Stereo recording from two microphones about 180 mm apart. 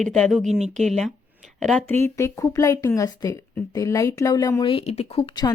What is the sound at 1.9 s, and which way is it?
Speech, 15° left (ahead or behind).